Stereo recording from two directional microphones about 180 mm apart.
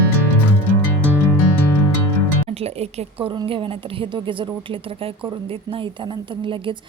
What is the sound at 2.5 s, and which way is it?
A woman's voice, 35° right (ahead or behind).